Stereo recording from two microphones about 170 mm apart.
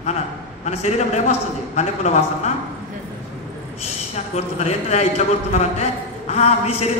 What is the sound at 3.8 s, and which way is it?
A man's voice, 40° left (ahead or behind).